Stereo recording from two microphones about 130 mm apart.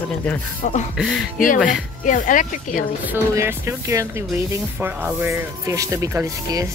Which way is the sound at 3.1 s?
20° right (ahead or behind).